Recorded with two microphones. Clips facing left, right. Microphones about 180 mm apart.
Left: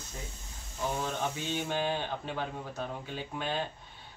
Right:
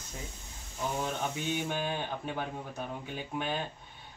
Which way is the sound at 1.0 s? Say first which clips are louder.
Even; 15° right (ahead or behind).